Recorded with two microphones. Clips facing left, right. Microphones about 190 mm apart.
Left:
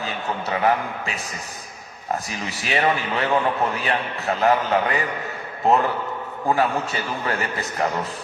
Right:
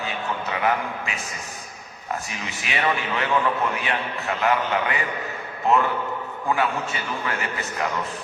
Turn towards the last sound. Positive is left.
turn(degrees=35)  # may be behind; listen again after turning